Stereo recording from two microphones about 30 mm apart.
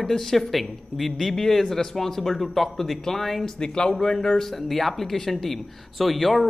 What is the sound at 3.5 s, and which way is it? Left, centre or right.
Speech, left.